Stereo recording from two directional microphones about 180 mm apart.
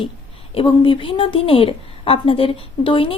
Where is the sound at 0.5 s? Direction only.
30° left (ahead or behind).